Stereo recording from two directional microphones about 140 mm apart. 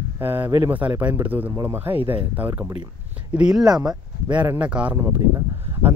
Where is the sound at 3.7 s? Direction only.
30° right (ahead or behind).